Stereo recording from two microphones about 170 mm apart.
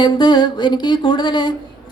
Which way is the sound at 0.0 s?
25° left (ahead or behind).